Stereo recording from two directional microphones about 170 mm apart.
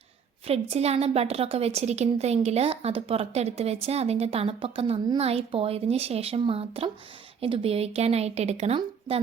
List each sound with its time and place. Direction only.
0.4 s a woman's voice: 35° right (ahead or behind)